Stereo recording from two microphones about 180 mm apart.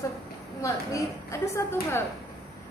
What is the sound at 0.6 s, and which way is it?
A woman's voice, 15° left (ahead or behind).